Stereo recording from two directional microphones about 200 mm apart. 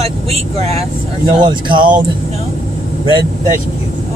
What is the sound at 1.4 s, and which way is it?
Speech, 25° right (ahead or behind).